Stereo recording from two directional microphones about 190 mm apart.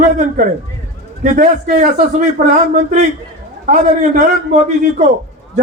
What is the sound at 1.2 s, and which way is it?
A man's voice, 45° right (ahead or behind).